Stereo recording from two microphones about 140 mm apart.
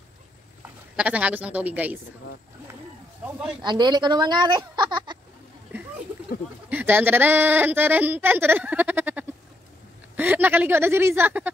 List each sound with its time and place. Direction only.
0.6 s speech: 10° right (ahead or behind)
3.6 s a woman's voice: 30° right (ahead or behind)
6.7 s speech: 15° right (ahead or behind)